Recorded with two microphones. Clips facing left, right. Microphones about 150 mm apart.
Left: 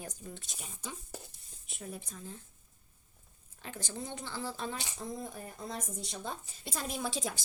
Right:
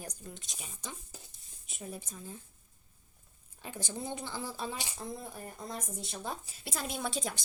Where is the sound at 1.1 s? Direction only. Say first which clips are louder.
Left 7 dB; 70° left (ahead or behind).